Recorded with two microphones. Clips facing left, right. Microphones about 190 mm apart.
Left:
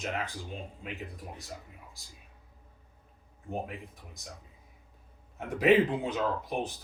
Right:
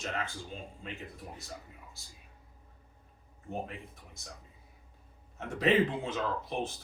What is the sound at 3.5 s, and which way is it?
Speech, 15° left (ahead or behind).